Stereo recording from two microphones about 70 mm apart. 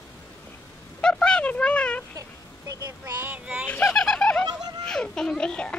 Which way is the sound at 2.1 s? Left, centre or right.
Right.